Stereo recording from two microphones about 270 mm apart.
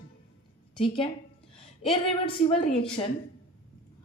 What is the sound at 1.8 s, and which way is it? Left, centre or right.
A woman's voice, centre.